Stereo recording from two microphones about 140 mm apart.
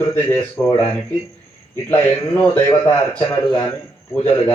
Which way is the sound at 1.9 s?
15° left (ahead or behind).